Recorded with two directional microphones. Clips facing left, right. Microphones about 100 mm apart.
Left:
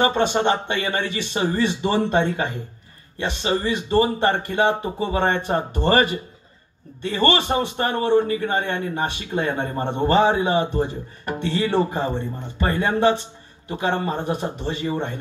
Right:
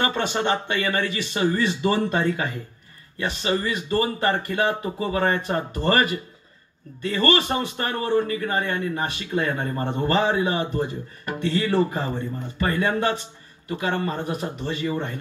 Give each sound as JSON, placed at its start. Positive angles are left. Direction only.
{"t": 0.0, "sound": "a man's voice", "side_deg": 25}